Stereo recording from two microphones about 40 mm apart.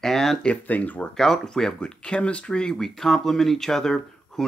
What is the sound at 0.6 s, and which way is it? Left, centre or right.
Speech, left.